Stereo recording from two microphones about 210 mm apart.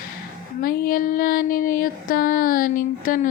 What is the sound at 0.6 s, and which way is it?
Female singing, 45° left (ahead or behind).